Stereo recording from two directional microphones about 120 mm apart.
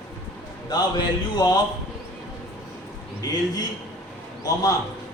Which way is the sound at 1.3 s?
35° left (ahead or behind).